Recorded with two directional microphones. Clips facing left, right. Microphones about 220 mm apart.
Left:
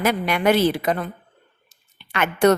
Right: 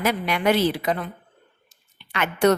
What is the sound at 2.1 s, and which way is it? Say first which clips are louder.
Speech: left 2 dB; 50° left (ahead or behind).